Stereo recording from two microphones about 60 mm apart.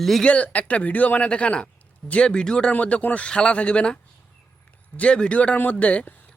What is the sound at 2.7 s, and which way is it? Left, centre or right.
Speech, left.